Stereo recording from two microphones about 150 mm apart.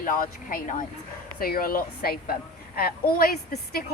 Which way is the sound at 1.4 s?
75° left (ahead or behind).